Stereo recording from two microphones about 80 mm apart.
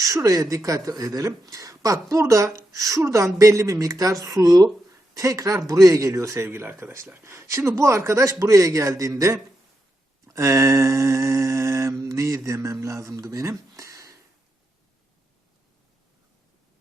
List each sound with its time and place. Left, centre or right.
0.0 s a man's voice: right
10.2 s mantra: right
12.6 s speech: right